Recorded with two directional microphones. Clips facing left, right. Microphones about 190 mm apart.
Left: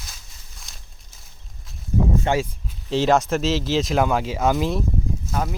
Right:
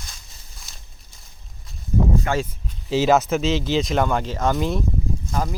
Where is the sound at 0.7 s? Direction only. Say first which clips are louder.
Left 1 dB; 5° right (ahead or behind).